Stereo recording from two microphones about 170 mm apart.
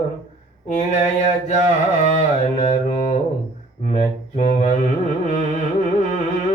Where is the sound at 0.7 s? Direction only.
45° left (ahead or behind).